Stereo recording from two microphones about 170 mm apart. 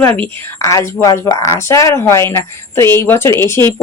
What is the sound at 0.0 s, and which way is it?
A woman's voice, 10° left (ahead or behind).